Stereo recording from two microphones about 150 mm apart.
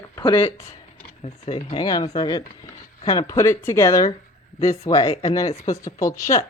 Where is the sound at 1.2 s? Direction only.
45° left (ahead or behind).